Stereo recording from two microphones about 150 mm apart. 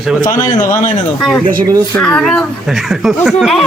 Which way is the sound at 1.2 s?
5° left (ahead or behind).